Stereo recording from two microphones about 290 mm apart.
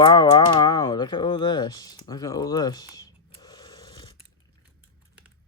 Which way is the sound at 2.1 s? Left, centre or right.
Centre.